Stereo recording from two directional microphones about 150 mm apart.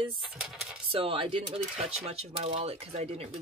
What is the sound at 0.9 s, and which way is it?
Speech, 40° right (ahead or behind).